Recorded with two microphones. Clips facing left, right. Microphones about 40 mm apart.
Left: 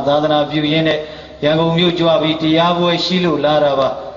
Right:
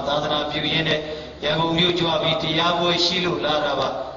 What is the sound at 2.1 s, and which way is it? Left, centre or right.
A man's voice, left.